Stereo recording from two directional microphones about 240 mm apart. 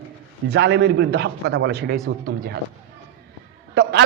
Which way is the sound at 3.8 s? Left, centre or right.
Right.